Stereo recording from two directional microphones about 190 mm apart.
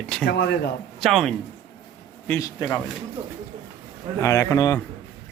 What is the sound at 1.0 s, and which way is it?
Speech, centre (ahead or behind).